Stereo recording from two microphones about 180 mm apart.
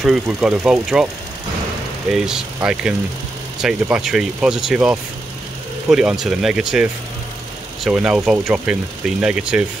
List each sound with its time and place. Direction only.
0.0 s speech: 5° right (ahead or behind)
2.2 s speech: 5° right (ahead or behind)